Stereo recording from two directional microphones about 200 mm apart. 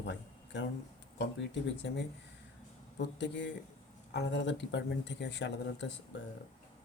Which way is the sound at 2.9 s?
60° left (ahead or behind).